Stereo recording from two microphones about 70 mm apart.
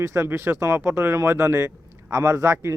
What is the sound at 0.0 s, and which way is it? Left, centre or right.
Speech, right.